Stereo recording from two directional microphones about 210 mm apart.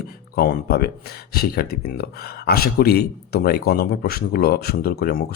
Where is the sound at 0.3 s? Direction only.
45° left (ahead or behind).